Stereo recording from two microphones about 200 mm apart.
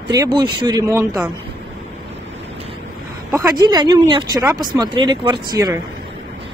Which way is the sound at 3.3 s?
15° right (ahead or behind).